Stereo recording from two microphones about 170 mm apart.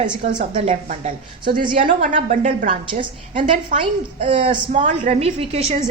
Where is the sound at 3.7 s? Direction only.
45° right (ahead or behind).